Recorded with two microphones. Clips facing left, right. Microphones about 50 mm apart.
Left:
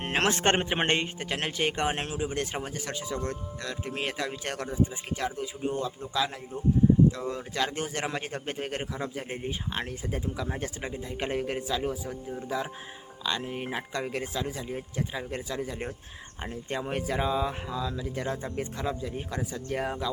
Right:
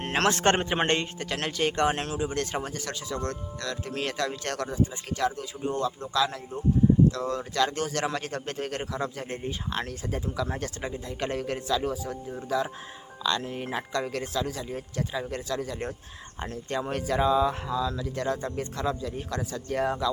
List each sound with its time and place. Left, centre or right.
0.0 s a man's voice: centre